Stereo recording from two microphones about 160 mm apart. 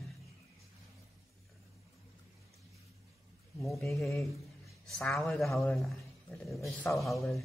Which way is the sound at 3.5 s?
Centre (ahead or behind).